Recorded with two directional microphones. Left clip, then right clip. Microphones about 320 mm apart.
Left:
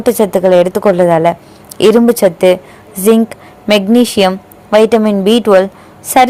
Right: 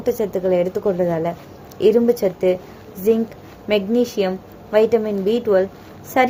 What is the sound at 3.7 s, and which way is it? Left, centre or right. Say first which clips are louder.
A woman's voice: left 9 dB; left.